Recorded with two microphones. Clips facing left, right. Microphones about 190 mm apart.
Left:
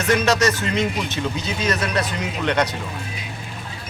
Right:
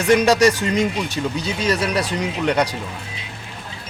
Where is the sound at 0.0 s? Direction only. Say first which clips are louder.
Right 4 dB; 15° right (ahead or behind).